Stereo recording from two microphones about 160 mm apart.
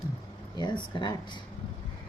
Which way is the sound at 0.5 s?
30° left (ahead or behind).